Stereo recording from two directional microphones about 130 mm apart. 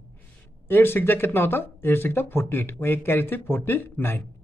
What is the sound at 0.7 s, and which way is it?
Speech, 15° left (ahead or behind).